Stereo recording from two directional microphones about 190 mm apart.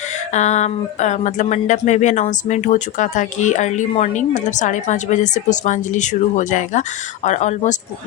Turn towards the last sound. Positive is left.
turn(degrees=35)  # may be behind; listen again after turning